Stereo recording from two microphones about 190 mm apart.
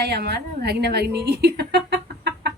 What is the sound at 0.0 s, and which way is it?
A woman's voice, 60° right (ahead or behind).